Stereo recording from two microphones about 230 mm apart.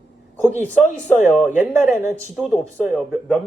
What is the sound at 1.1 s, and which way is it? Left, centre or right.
Speech, centre.